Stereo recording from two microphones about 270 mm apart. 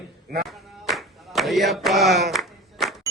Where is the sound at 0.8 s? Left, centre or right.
Centre.